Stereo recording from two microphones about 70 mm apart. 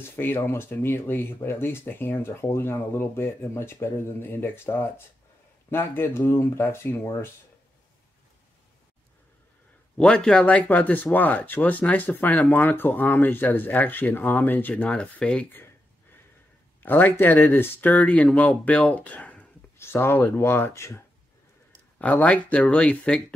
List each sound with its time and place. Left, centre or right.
0.1 s speech: left
9.9 s speech: centre
14.7 s speech: centre
16.8 s speech: left
19.8 s speech: left
21.9 s speech: left